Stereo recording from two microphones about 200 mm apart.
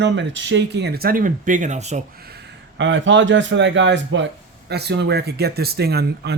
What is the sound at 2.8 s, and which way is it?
Speech, 65° right (ahead or behind).